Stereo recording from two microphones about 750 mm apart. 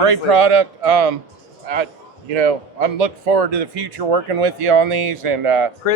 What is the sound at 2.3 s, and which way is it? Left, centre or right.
A man's voice, right.